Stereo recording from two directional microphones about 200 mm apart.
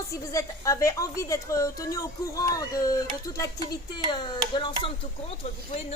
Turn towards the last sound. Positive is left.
turn(degrees=25)  # may be behind; listen again after turning